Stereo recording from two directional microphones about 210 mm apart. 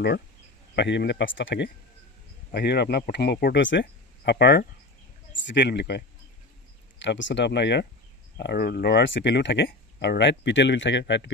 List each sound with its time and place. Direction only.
0.7 s speech: 55° left (ahead or behind)